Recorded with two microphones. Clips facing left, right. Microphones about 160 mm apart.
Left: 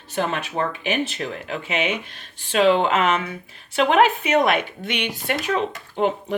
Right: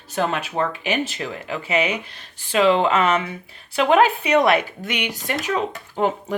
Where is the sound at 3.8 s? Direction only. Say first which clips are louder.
Right 1 dB; 35° right (ahead or behind).